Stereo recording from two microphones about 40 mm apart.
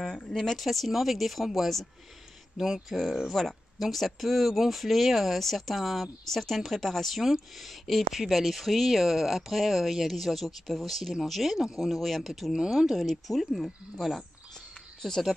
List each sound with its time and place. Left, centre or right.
0.3 s speech: centre
12.5 s speech: centre
12.8 s speech: centre
15.0 s speech: centre